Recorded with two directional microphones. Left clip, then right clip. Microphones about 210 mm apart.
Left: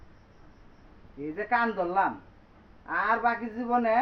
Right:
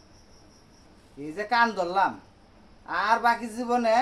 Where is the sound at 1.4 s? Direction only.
20° right (ahead or behind).